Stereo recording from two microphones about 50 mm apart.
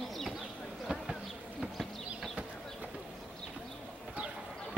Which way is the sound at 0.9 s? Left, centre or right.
Right.